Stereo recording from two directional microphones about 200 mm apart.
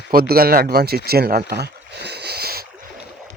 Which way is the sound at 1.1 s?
50° right (ahead or behind).